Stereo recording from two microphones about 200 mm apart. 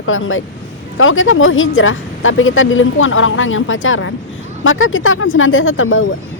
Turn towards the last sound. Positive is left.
turn(degrees=85)